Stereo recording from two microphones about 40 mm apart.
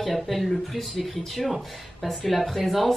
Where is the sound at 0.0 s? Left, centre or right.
Centre.